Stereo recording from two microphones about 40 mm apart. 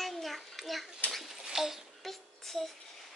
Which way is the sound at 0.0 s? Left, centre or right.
Centre.